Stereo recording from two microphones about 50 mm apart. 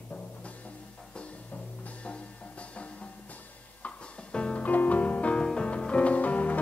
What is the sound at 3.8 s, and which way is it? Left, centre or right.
Music, left.